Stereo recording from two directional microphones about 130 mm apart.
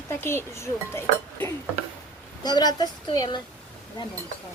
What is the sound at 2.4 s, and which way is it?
A woman's voice, 30° left (ahead or behind).